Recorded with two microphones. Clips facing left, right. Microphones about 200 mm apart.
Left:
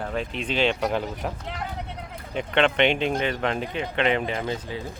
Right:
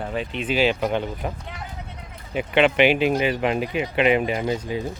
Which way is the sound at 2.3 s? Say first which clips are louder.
Right 3 dB; 5° right (ahead or behind).